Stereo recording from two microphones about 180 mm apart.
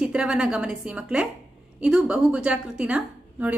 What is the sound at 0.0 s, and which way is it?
A woman's voice, 5° right (ahead or behind).